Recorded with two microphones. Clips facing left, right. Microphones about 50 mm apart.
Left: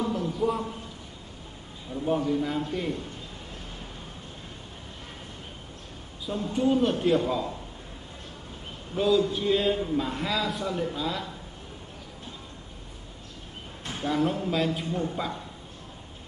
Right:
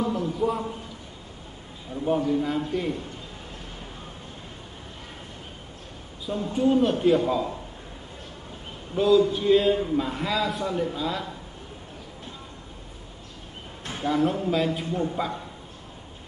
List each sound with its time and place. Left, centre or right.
0.0 s a sound: centre
2.0 s a man's voice: centre
6.3 s a man's voice: centre
6.7 s a man's voice: centre
8.9 s a man's voice: centre
14.0 s a man's voice: centre